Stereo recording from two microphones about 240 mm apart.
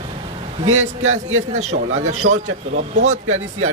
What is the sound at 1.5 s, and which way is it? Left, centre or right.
Speech, right.